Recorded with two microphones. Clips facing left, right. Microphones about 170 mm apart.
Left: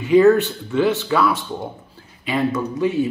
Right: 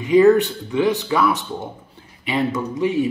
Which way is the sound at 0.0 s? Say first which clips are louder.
Even; 15° right (ahead or behind).